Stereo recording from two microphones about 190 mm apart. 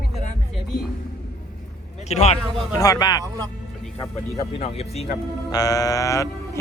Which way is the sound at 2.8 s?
20° left (ahead or behind).